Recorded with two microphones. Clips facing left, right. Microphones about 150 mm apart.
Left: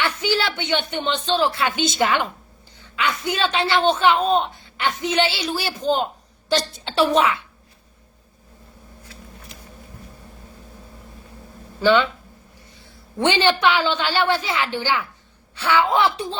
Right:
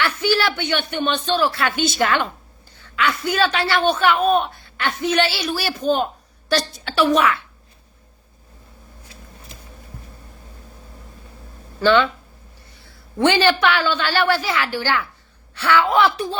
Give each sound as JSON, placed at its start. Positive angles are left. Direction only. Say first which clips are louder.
{"t": 0.0, "sound": "a woman's voice", "louder": "right 2 dB", "side_deg": 20}
{"t": 11.8, "sound": "a man's voice", "louder": "right 1 dB", "side_deg": 15}